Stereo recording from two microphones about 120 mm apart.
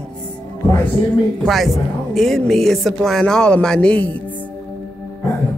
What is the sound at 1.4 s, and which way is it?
Speech, centre (ahead or behind).